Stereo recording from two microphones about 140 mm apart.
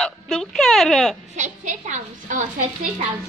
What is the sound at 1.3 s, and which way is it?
A woman's voice, 60° right (ahead or behind).